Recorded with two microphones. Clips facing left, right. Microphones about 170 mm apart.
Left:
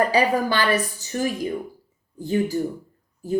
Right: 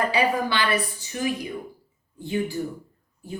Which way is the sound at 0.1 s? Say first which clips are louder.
Left 3 dB; 40° left (ahead or behind).